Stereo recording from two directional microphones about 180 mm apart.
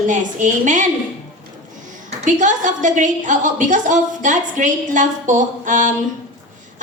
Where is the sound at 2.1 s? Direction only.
45° right (ahead or behind).